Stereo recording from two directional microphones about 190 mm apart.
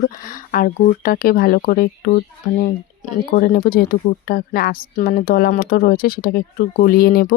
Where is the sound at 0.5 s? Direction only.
50° left (ahead or behind).